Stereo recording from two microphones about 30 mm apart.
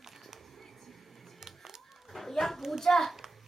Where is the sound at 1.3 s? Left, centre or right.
Centre.